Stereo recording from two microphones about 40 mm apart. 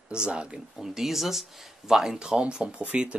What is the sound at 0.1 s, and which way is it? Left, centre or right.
Speech, right.